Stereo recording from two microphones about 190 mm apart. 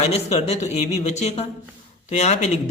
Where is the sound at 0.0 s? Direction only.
35° left (ahead or behind).